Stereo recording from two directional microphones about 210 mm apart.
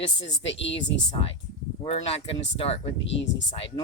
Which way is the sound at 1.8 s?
30° left (ahead or behind).